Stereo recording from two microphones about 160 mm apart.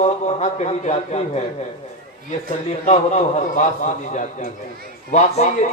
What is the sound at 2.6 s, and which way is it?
Speech, 45° left (ahead or behind).